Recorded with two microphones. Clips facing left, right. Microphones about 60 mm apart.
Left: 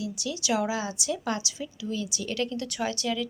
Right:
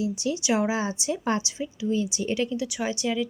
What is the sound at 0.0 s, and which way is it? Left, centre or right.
A woman's voice, right.